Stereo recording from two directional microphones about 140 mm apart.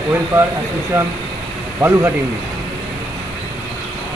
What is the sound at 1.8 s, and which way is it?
Speech, 15° right (ahead or behind).